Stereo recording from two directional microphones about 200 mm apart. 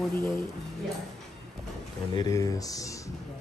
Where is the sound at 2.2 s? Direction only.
15° left (ahead or behind).